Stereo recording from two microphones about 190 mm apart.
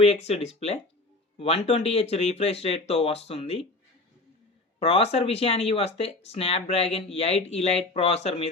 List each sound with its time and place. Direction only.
0.0 s speech: 35° left (ahead or behind)
4.8 s speech: 30° left (ahead or behind)